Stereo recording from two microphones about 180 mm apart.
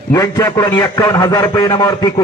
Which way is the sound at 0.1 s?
20° left (ahead or behind).